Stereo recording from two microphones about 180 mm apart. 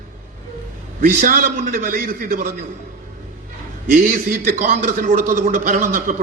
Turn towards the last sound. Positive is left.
turn(degrees=-50)  # may be behind; listen again after turning